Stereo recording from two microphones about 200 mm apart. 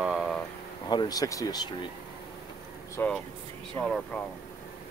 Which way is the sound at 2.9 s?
5° left (ahead or behind).